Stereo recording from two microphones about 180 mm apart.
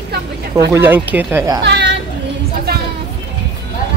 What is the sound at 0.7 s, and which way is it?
Speech, 10° right (ahead or behind).